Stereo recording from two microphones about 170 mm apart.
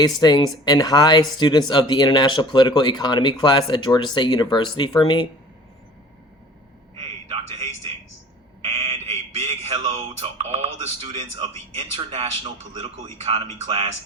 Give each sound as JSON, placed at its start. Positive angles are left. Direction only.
{"t": 0.2, "sound": "speech", "side_deg": 25}
{"t": 7.0, "sound": "a sound", "side_deg": -40}
{"t": 11.7, "sound": "speech", "side_deg": -35}